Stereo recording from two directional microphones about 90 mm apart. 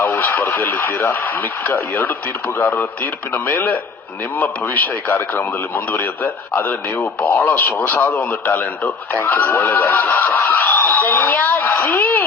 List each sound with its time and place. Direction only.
0.0 s radio: 20° left (ahead or behind)
0.3 s a man's voice: 25° left (ahead or behind)
10.4 s a sound: 20° left (ahead or behind)